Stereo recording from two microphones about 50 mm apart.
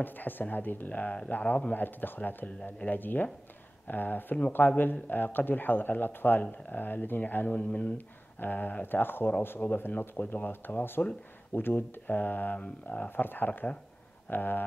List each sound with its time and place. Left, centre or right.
0.0 s speech: left
7.4 s speech: left
8.4 s speech: left